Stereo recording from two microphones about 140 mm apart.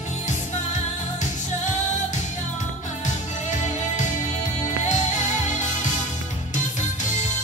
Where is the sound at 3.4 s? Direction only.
60° left (ahead or behind).